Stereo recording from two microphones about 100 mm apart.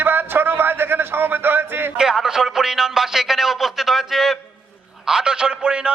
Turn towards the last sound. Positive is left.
turn(degrees=-10)  # may be behind; listen again after turning